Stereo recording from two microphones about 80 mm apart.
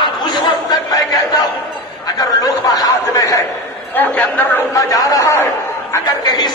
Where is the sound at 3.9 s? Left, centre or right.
Left.